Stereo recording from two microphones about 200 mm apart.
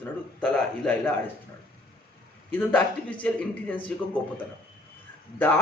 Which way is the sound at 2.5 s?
10° left (ahead or behind).